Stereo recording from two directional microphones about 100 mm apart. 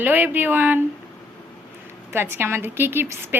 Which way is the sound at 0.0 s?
20° right (ahead or behind).